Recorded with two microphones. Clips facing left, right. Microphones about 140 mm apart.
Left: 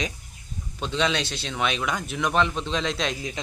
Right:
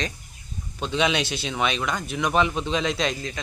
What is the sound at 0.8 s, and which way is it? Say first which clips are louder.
Speech: right 2 dB; 10° right (ahead or behind).